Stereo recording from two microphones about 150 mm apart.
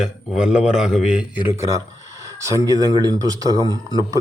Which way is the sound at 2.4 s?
20° right (ahead or behind).